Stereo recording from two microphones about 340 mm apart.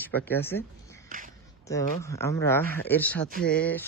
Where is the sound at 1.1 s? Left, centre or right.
Right.